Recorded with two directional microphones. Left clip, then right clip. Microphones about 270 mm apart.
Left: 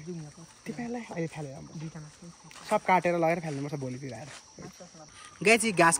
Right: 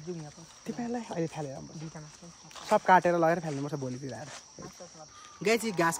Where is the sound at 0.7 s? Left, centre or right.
Right.